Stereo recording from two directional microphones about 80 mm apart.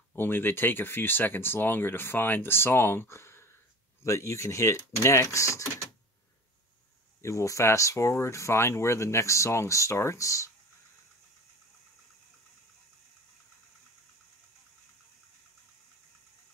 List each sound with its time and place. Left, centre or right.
0.1 s speech: left
7.2 s speech: left